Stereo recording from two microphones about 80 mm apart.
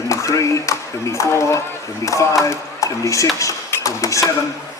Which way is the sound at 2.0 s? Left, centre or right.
Left.